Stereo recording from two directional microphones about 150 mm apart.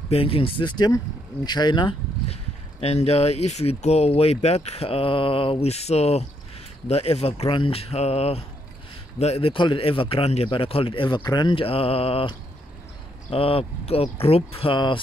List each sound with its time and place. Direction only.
0.1 s speech: 40° left (ahead or behind)